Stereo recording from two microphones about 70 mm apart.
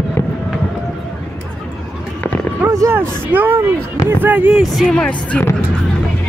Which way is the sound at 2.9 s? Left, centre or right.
Right.